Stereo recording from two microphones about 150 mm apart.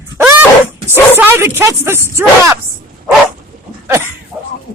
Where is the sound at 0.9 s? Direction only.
15° right (ahead or behind).